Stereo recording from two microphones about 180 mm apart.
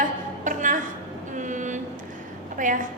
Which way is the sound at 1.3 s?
45° right (ahead or behind).